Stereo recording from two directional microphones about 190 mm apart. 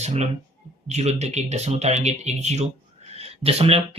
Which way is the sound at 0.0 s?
35° right (ahead or behind).